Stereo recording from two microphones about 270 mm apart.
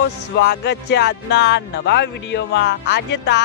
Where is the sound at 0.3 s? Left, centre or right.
Left.